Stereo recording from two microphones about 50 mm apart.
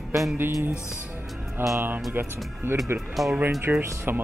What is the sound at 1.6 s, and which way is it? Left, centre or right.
Speech, right.